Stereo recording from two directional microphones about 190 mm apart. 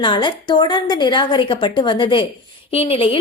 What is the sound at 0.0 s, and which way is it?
A woman's voice, 25° left (ahead or behind).